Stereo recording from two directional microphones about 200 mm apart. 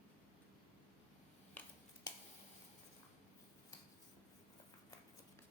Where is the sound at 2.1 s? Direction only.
20° left (ahead or behind).